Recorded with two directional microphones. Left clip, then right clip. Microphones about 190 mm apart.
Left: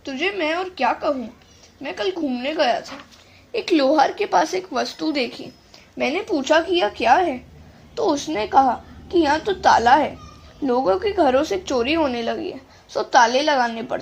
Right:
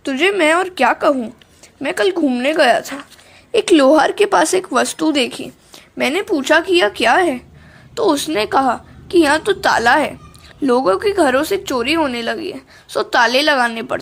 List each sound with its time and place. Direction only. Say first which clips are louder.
0.0 s a woman's voice: right 9 dB; 35° right (ahead or behind); by 14.0 s 20° right (ahead or behind)